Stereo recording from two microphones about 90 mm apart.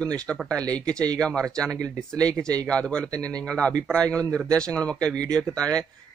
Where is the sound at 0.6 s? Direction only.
10° left (ahead or behind).